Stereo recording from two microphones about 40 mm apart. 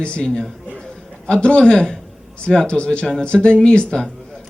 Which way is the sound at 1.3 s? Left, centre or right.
Left.